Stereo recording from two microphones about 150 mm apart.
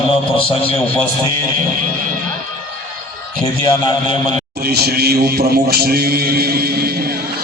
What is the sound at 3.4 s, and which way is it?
Speech, 35° left (ahead or behind).